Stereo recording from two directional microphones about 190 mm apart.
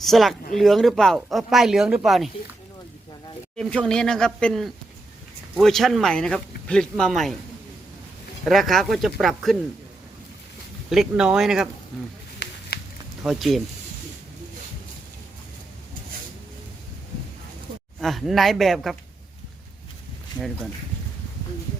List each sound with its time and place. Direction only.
0.0 s speech: centre (ahead or behind)
3.6 s speech: 5° left (ahead or behind)
8.4 s speech: centre (ahead or behind)
10.8 s speech: centre (ahead or behind)
12.7 s a sound: 55° left (ahead or behind)
13.2 s speech: centre (ahead or behind)
18.0 s speech: centre (ahead or behind)